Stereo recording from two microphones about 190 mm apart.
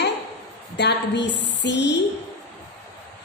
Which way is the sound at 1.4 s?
65° left (ahead or behind).